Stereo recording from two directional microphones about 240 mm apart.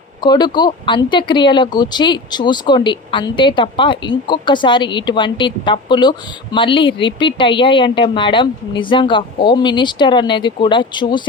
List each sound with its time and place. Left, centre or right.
0.2 s speech: centre